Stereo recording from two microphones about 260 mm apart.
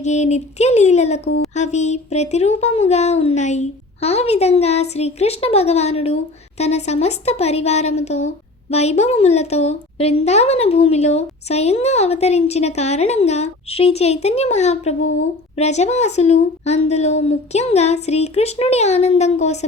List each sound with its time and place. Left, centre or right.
0.0 s speech: left